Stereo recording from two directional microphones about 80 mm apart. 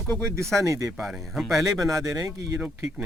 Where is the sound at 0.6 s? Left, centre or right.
Right.